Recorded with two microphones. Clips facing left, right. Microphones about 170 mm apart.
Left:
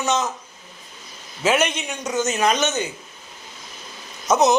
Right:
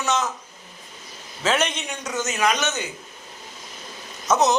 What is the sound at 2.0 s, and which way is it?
Speech, 20° left (ahead or behind).